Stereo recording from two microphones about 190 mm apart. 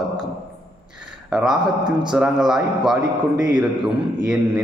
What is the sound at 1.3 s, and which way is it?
A man's voice, 5° right (ahead or behind).